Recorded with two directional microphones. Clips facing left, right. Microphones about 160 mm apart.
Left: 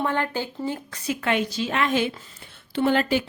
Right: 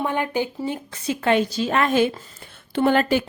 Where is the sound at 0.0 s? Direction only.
15° right (ahead or behind).